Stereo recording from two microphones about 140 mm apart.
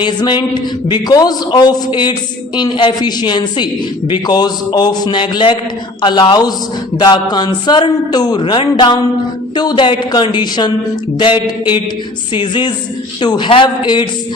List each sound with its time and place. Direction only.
0.0 s a man's voice: 30° left (ahead or behind)